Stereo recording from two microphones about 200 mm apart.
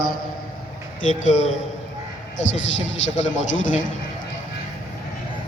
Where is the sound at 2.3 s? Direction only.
70° left (ahead or behind).